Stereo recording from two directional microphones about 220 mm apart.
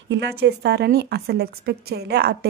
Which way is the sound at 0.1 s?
50° right (ahead or behind).